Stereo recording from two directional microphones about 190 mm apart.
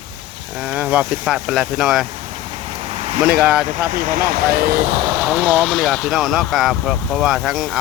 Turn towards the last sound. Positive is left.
turn(degrees=0)  # may be behind; listen again after turning